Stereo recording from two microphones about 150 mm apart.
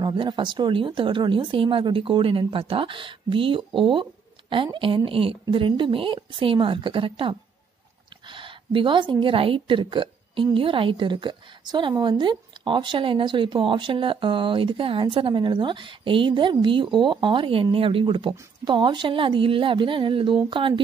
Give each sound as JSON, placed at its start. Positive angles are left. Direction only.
{"t": 0.0, "sound": "a woman's voice", "side_deg": -35}